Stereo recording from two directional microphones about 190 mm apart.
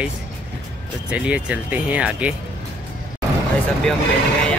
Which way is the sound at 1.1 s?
5° right (ahead or behind).